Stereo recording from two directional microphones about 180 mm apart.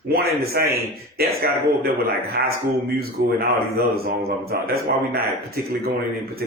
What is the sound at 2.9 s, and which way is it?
Speech, 60° right (ahead or behind).